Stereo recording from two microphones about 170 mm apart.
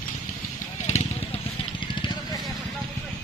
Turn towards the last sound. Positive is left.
turn(degrees=40)  # may be behind; listen again after turning